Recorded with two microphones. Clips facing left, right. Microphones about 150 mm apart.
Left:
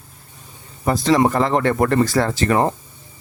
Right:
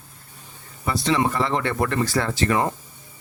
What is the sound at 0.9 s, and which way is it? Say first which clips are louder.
Speech: left 6 dB; 40° left (ahead or behind).